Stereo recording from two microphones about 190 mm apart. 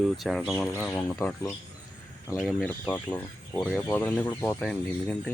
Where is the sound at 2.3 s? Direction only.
5° right (ahead or behind).